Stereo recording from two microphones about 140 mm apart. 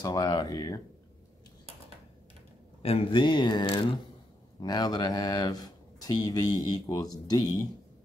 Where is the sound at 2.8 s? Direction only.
45° left (ahead or behind); by 7.4 s 25° left (ahead or behind).